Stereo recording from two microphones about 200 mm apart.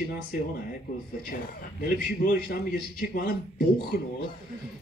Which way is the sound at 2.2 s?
50° left (ahead or behind).